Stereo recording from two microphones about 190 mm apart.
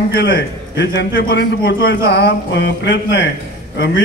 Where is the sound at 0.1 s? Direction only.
65° left (ahead or behind).